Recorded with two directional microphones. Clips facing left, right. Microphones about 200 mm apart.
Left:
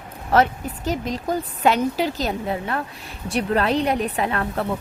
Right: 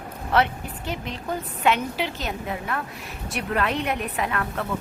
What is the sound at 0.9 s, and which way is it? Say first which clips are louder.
Speech: left 6 dB; 40° left (ahead or behind).